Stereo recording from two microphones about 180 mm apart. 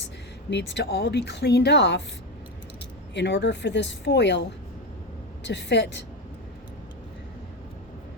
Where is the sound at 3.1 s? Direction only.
75° left (ahead or behind).